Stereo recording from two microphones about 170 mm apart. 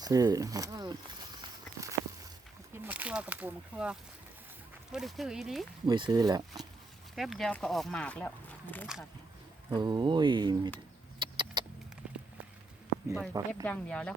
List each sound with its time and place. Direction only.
0.0 s speech: 20° right (ahead or behind)
1.4 s walk: 20° right (ahead or behind)
2.7 s speech: 10° right (ahead or behind)
5.8 s speech: 25° right (ahead or behind)
7.2 s speech: centre (ahead or behind)
9.6 s speech: 25° right (ahead or behind)
11.2 s vehicle: 30° right (ahead or behind)
12.0 s a sound: 5° right (ahead or behind)
13.3 s speech: 20° right (ahead or behind)
13.7 s speech: 5° left (ahead or behind)